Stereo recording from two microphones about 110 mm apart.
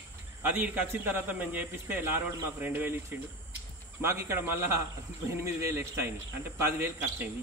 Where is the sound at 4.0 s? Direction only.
25° right (ahead or behind).